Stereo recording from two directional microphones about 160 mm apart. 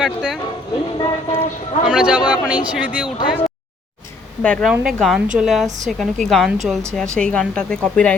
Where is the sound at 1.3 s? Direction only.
45° left (ahead or behind).